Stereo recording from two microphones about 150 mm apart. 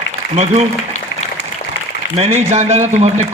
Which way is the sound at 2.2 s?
45° right (ahead or behind).